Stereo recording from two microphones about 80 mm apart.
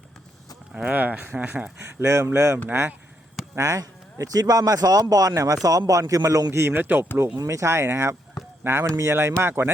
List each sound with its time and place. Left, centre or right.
0.7 s speech: centre
1.8 s speech: right
3.5 s a man's voice: right
6.5 s speech: right
7.3 s speech: right